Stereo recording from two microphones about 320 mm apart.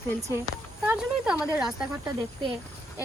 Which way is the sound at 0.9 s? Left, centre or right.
Centre.